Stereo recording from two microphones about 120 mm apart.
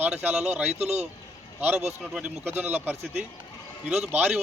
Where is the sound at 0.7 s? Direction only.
65° right (ahead or behind).